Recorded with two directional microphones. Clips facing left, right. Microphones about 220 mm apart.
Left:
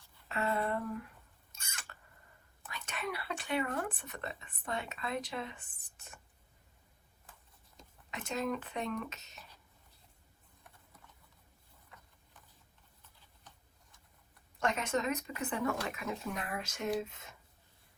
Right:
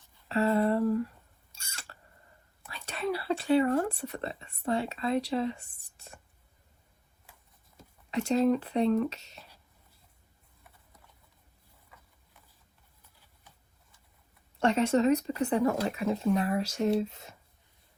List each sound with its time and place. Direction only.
0.3 s speech: 30° right (ahead or behind)
1.5 s a sound: 30° right (ahead or behind)
2.6 s speech: 30° right (ahead or behind)
8.1 s speech: 30° right (ahead or behind)
11.9 s a sound: 10° right (ahead or behind)
14.6 s speech: 30° right (ahead or behind)